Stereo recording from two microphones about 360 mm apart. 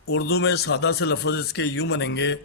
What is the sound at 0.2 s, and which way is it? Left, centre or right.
A man's voice, left.